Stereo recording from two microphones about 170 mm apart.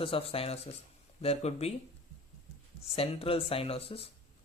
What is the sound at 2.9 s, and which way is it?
Speech, 35° left (ahead or behind).